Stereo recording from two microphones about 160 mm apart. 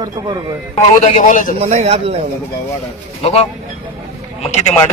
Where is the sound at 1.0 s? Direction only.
50° left (ahead or behind).